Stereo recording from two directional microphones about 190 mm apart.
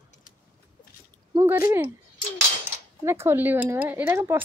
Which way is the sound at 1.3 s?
15° right (ahead or behind).